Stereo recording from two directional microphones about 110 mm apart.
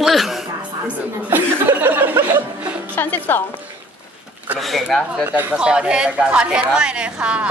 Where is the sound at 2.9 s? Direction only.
15° left (ahead or behind).